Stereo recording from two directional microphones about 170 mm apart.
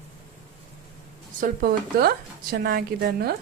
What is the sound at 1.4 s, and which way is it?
Speech, 60° right (ahead or behind).